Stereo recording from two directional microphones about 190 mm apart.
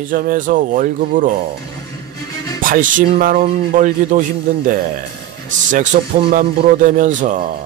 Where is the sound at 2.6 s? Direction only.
45° right (ahead or behind).